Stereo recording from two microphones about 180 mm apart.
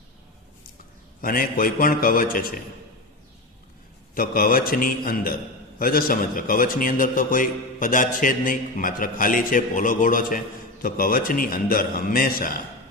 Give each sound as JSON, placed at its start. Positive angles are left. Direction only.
{"t": 1.2, "sound": "a man's voice", "side_deg": 55}
{"t": 4.1, "sound": "a man's voice", "side_deg": 55}